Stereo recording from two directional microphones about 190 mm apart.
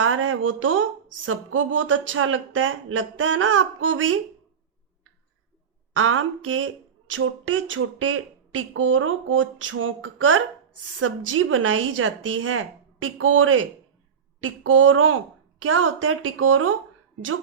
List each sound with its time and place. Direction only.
0.0 s speech: 90° right
5.9 s speech: 90° right